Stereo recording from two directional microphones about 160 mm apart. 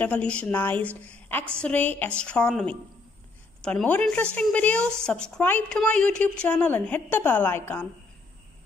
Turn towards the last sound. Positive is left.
turn(degrees=15)  # may be behind; listen again after turning